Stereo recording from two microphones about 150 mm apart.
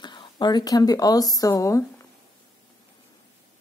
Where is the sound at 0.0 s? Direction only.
30° left (ahead or behind).